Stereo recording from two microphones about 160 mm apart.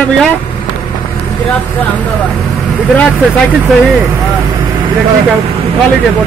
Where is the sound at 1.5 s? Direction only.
10° left (ahead or behind).